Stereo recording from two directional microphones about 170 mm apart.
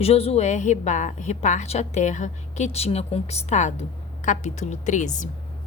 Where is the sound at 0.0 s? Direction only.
35° left (ahead or behind).